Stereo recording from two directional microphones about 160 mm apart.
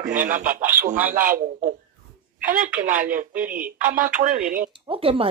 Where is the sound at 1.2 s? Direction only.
55° right (ahead or behind).